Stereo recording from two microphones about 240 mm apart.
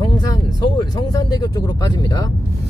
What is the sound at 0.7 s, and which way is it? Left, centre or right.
Speech, centre.